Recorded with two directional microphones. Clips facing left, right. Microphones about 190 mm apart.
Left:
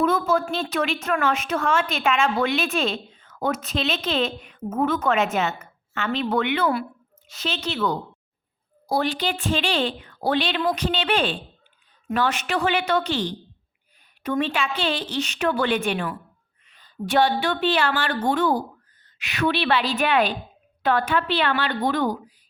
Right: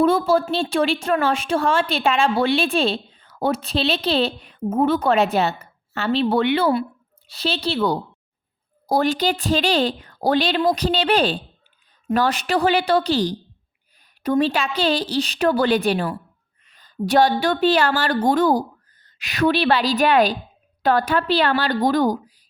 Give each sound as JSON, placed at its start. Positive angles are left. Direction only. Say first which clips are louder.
{"t": 0.0, "sound": "a woman's voice", "louder": "right 4 dB", "side_deg": -30}